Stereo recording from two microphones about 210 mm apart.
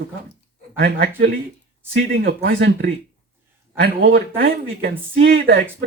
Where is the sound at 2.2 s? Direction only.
55° right (ahead or behind).